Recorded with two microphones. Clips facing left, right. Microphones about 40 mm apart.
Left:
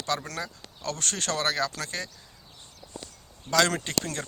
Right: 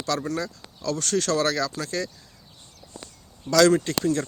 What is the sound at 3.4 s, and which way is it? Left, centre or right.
Speech, left.